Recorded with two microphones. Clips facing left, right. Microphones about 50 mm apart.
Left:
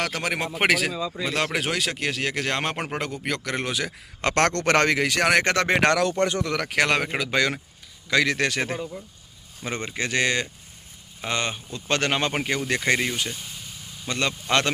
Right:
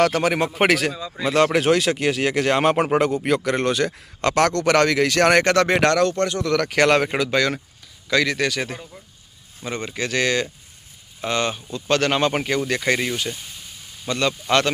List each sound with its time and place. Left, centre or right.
0.0 s speech: centre
4.4 s a man's voice: left
4.9 s speech: centre
5.2 s speech: centre
5.5 s speech: left
6.0 s speech: centre
6.2 s speech: left
6.6 s speech: centre
7.3 s speech: centre; by 8.8 s left
9.7 s speech: centre
10.1 s speech: centre
12.2 s speech: centre